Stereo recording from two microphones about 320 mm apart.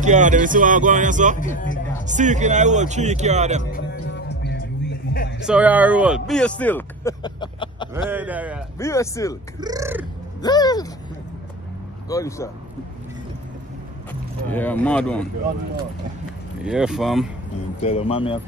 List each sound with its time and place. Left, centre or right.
0.0 s speech: right
3.7 s music: left
5.5 s speech: centre
8.1 s speech: centre
8.7 s speech: centre
9.6 s speech: centre
10.4 s speech: centre
12.1 s speech: centre
14.5 s speech: centre
16.6 s speech: centre
17.7 s speech: centre